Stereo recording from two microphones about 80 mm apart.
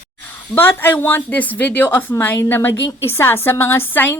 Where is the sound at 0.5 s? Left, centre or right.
Left.